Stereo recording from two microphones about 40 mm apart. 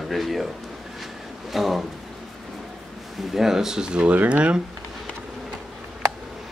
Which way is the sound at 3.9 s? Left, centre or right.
Right.